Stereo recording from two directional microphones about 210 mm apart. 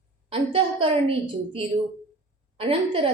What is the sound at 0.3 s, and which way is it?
Speech, 25° right (ahead or behind).